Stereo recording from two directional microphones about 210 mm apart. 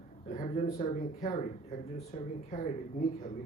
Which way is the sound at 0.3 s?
35° left (ahead or behind).